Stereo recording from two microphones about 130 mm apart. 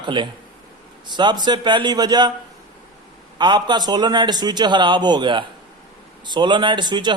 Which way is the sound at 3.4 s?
35° right (ahead or behind).